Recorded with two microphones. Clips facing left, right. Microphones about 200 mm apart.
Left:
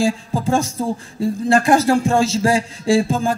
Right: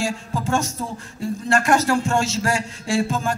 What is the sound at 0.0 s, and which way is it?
Speech, 30° left (ahead or behind).